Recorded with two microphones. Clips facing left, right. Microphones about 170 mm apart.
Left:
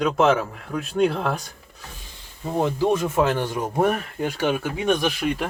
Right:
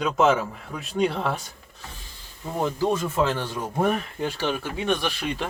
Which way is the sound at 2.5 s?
20° left (ahead or behind).